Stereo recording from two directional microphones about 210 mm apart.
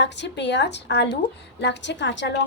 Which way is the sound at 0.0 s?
55° left (ahead or behind).